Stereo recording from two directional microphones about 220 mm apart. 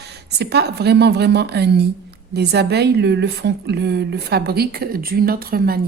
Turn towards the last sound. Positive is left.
turn(degrees=-45)  # may be behind; listen again after turning